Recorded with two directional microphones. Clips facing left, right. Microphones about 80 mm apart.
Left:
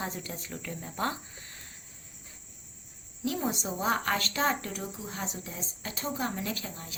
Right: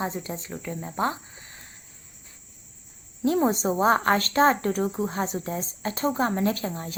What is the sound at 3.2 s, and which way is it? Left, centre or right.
Speech, right.